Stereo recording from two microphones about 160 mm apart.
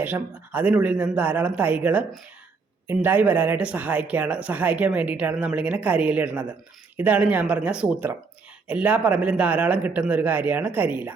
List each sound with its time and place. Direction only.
0.0 s speech: 10° right (ahead or behind)